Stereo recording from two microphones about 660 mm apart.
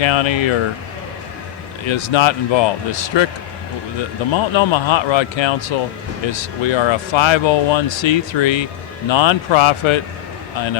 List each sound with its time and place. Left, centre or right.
0.0 s speech: left
1.8 s speech: left
4.3 s speech: left